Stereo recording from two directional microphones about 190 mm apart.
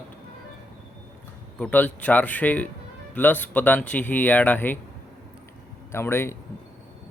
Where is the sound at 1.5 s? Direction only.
10° left (ahead or behind).